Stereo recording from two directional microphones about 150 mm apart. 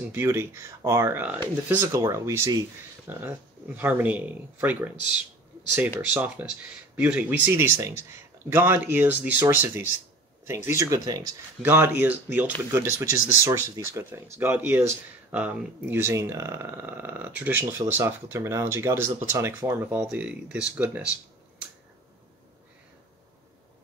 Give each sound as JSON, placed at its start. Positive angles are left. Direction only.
{"t": 0.1, "sound": "speech", "side_deg": -15}
{"t": 5.9, "sound": "speech", "side_deg": -10}
{"t": 11.6, "sound": "speech", "side_deg": -15}